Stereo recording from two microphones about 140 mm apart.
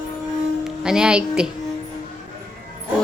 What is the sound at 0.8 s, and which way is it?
Speech, 5° right (ahead or behind).